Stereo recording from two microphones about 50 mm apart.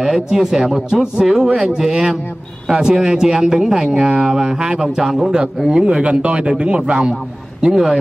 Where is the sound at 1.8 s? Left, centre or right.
Centre.